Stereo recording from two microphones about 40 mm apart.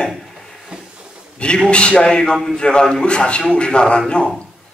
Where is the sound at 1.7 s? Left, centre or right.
Left.